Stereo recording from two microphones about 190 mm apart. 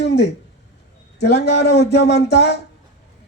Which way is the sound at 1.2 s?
60° left (ahead or behind).